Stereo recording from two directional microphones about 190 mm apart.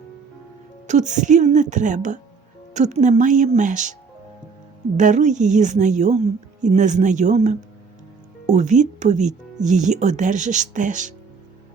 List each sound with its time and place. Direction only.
0.9 s speech: 40° right (ahead or behind)
4.9 s speech: 40° right (ahead or behind)